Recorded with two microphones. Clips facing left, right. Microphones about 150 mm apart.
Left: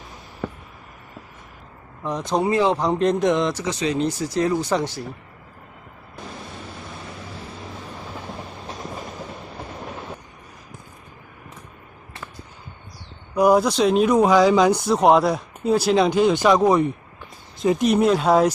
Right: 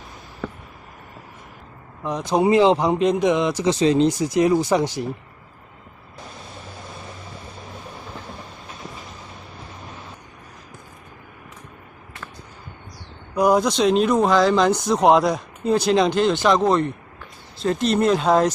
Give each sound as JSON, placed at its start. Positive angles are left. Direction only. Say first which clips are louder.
{"t": 2.0, "sound": "speech", "louder": "right 2 dB", "side_deg": 0}
{"t": 2.4, "sound": "speech", "louder": "right 5 dB", "side_deg": -20}
{"t": 2.8, "sound": "speech", "louder": "right 1 dB", "side_deg": -5}
{"t": 3.6, "sound": "speech", "louder": "right 6 dB", "side_deg": -30}
{"t": 4.1, "sound": "speech", "louder": "right 4 dB", "side_deg": -15}
{"t": 13.4, "sound": "speech", "louder": "left 1 dB", "side_deg": 5}